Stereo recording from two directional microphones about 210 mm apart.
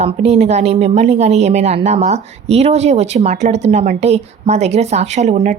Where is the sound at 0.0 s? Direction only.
30° right (ahead or behind).